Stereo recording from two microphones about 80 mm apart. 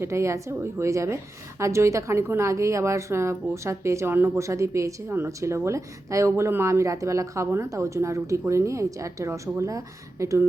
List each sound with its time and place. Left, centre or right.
0.0 s a woman's voice: right